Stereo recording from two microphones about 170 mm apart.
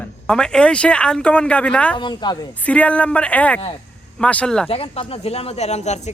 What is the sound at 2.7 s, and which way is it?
A woman's voice, 10° left (ahead or behind).